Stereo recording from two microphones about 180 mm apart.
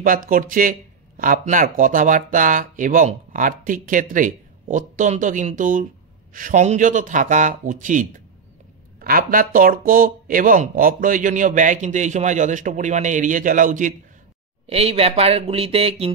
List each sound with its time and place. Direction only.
0.0 s speech: 50° right (ahead or behind)
14.7 s speech: 35° right (ahead or behind)